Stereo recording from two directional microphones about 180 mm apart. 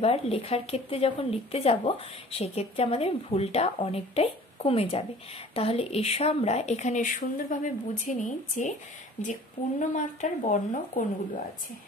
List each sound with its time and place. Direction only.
0.0 s speech: 35° left (ahead or behind)
9.8 s speech: 45° left (ahead or behind)